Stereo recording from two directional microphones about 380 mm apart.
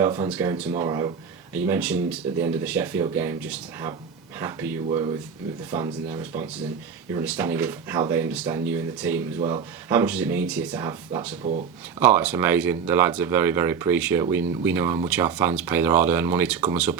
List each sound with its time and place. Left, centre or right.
0.0 s speech: centre